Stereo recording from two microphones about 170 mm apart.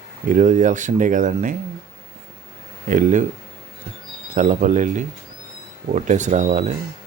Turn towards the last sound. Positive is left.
turn(degrees=-45)  # may be behind; listen again after turning